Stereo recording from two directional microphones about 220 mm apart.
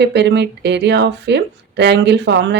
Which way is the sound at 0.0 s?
50° right (ahead or behind).